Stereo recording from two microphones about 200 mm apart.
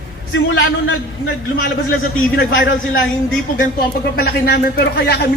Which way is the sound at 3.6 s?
50° left (ahead or behind).